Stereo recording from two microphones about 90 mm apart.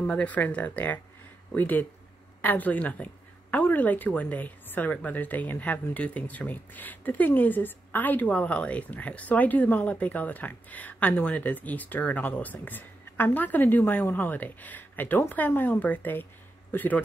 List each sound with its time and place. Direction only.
0.0 s a woman's voice: 15° left (ahead or behind)